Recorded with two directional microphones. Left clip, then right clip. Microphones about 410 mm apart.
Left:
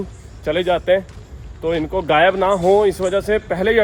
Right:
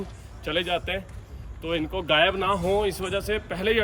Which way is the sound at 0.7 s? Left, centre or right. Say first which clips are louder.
Left 12 dB; left.